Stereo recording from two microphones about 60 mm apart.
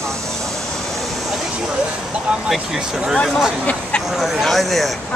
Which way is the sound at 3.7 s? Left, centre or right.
Left.